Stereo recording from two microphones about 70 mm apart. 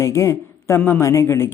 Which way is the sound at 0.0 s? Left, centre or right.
Left.